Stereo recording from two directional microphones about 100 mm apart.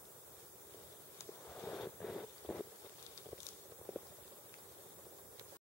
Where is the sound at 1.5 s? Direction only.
15° left (ahead or behind).